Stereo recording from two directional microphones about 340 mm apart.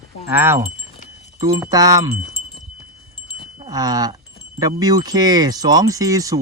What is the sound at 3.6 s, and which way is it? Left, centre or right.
Speech, centre.